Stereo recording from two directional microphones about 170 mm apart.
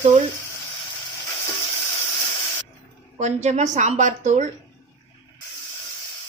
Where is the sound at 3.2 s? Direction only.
40° right (ahead or behind).